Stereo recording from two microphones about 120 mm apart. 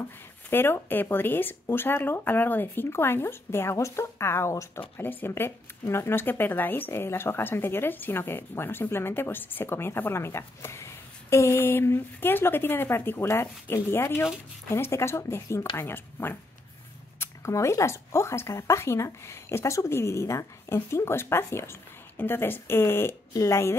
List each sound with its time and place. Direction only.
0.5 s a woman's voice: 20° left (ahead or behind)